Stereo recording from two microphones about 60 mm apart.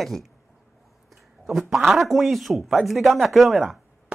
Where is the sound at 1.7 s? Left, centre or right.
Centre.